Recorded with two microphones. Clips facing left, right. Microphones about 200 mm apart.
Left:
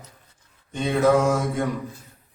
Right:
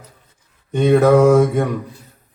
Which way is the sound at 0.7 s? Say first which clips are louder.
Right 7 dB; 65° right (ahead or behind).